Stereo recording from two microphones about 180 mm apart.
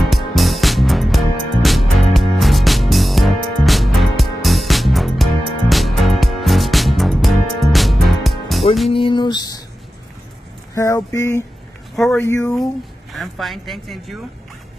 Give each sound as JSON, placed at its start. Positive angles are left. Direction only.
{"t": 0.0, "sound": "music", "side_deg": 0}
{"t": 8.9, "sound": "a sound", "side_deg": 25}
{"t": 10.7, "sound": "speech", "side_deg": 15}
{"t": 11.9, "sound": "speech", "side_deg": 0}
{"t": 12.2, "sound": "speech", "side_deg": 15}
{"t": 13.1, "sound": "speech", "side_deg": 0}